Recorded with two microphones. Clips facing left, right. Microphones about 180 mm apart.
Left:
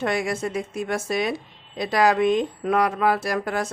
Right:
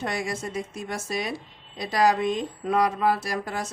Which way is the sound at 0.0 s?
60° left (ahead or behind).